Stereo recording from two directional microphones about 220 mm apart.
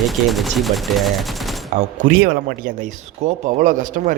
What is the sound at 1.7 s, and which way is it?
Speech, 35° right (ahead or behind).